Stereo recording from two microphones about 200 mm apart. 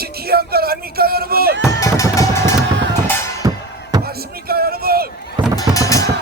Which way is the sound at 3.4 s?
15° right (ahead or behind).